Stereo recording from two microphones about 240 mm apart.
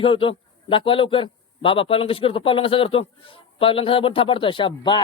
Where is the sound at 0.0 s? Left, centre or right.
Left.